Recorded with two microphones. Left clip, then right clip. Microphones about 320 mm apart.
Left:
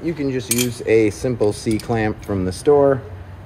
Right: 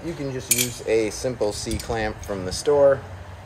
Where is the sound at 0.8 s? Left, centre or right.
Left.